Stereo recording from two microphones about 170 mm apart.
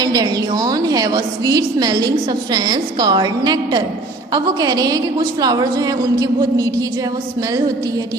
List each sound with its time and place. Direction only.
0.0 s a woman's voice: 20° right (ahead or behind)